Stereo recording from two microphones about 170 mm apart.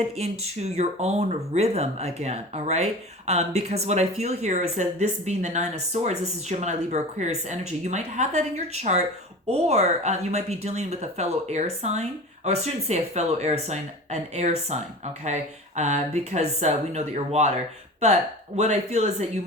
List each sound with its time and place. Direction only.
0.2 s speech: 40° right (ahead or behind)